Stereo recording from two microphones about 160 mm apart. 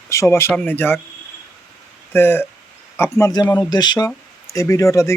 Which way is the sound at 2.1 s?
15° left (ahead or behind).